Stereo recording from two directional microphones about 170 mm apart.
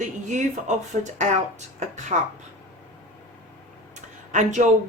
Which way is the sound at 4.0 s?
45° right (ahead or behind).